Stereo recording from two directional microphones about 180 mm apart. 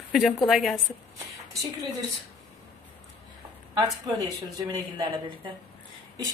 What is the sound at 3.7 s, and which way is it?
Speech, 20° right (ahead or behind).